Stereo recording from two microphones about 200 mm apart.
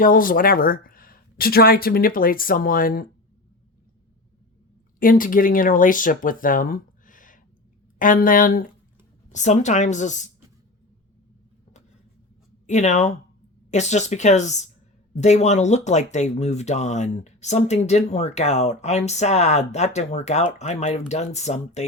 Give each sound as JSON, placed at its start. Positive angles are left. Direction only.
{"t": 0.0, "sound": "speech", "side_deg": 45}
{"t": 4.9, "sound": "speech", "side_deg": 45}
{"t": 12.6, "sound": "speech", "side_deg": 35}